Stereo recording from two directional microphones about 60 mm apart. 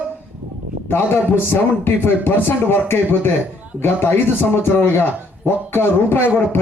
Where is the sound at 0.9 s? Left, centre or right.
Left.